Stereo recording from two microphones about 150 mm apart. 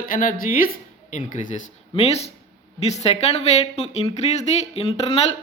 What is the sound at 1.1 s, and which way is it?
Speech, 55° left (ahead or behind).